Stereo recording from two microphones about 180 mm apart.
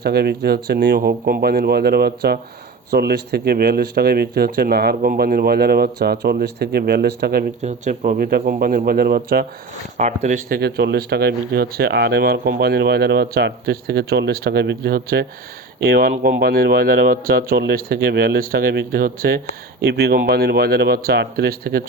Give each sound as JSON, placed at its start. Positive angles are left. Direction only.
{"t": 0.0, "sound": "speech", "side_deg": -60}
{"t": 7.6, "sound": "speech", "side_deg": -40}
{"t": 10.0, "sound": "speech", "side_deg": -45}
{"t": 10.6, "sound": "speech", "side_deg": -65}